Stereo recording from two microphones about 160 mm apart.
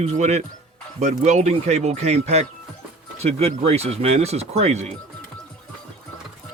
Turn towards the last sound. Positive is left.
turn(degrees=-45)  # may be behind; listen again after turning